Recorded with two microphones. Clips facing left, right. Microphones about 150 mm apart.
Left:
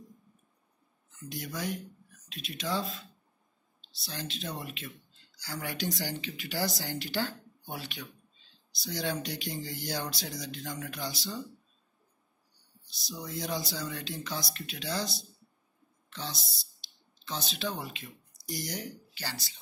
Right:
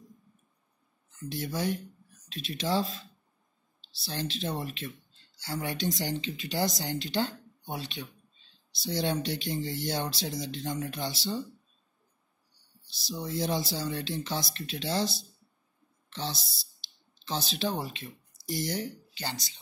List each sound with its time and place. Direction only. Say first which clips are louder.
1.3 s speech: right 4 dB; 25° right (ahead or behind)
12.9 s speech: right 5 dB; 25° right (ahead or behind)